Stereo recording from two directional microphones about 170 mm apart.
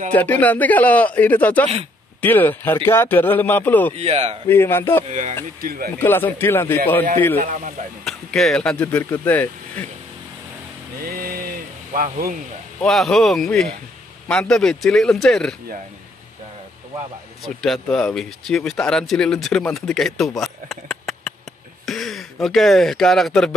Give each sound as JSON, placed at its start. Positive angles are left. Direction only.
{"t": 0.1, "sound": "speech", "side_deg": 10}
{"t": 3.9, "sound": "speech", "side_deg": -40}
{"t": 4.5, "sound": "speech", "side_deg": 15}
{"t": 5.6, "sound": "speech", "side_deg": -60}
{"t": 5.9, "sound": "speech", "side_deg": 15}
{"t": 8.0, "sound": "speech", "side_deg": 0}
{"t": 11.0, "sound": "a sound", "side_deg": -60}
{"t": 11.9, "sound": "speech", "side_deg": -55}
{"t": 12.8, "sound": "speech", "side_deg": 0}
{"t": 17.6, "sound": "speech", "side_deg": 0}